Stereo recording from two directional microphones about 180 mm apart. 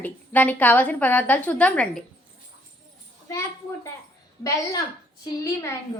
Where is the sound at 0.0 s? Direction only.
10° left (ahead or behind).